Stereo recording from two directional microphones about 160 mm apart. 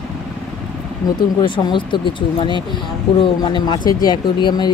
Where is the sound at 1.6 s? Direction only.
30° left (ahead or behind).